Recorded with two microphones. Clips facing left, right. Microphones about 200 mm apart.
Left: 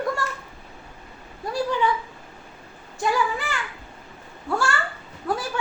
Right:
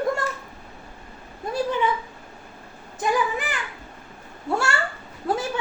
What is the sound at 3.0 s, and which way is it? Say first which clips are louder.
Speech: even; 20° right (ahead or behind).